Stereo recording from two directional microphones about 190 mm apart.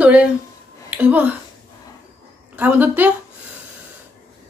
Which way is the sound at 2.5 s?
10° right (ahead or behind).